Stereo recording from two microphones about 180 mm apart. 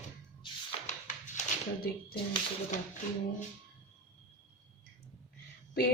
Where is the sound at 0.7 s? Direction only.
35° left (ahead or behind).